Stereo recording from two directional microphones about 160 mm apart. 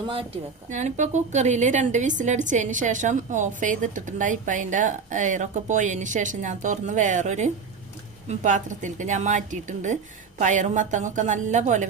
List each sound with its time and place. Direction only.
0.7 s a woman's voice: 50° right (ahead or behind)